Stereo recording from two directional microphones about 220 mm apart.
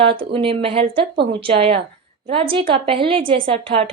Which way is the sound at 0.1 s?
25° right (ahead or behind).